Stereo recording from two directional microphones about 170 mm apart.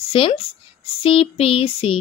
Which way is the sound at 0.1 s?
35° left (ahead or behind).